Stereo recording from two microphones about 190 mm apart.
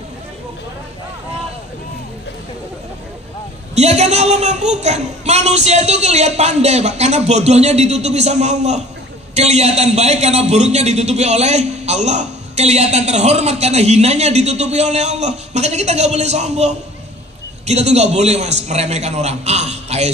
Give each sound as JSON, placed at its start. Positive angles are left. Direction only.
{"t": 3.7, "sound": "a man's voice", "side_deg": -35}